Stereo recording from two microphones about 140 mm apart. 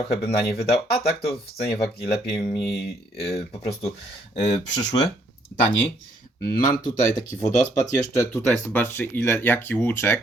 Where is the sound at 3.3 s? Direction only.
45° left (ahead or behind).